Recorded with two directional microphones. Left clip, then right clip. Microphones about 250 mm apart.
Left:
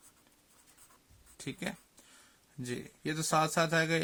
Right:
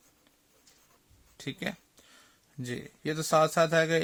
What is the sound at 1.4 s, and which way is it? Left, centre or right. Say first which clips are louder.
Speech: right 4 dB; right.